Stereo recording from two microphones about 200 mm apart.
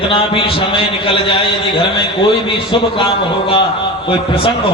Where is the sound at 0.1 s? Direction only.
25° left (ahead or behind).